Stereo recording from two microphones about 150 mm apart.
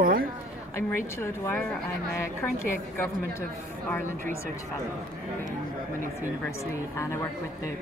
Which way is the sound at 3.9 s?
15° left (ahead or behind).